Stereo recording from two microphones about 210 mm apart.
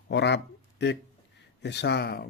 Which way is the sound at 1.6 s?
55° left (ahead or behind).